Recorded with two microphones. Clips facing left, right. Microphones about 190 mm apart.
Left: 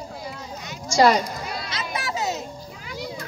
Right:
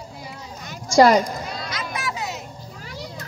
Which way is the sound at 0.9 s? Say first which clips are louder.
Right 3 dB; 50° right (ahead or behind).